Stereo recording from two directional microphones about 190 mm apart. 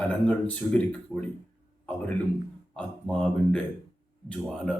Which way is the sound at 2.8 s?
5° left (ahead or behind).